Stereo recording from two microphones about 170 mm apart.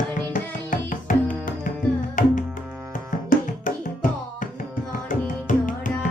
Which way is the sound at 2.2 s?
50° left (ahead or behind).